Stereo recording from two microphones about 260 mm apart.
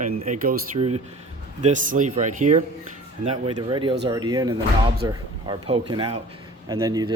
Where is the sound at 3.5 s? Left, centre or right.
Centre.